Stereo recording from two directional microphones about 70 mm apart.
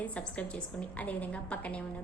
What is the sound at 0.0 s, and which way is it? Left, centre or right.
A woman's voice, left.